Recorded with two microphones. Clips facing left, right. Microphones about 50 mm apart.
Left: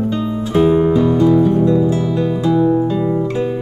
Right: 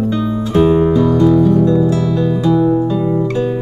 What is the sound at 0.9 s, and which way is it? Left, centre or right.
Music, centre.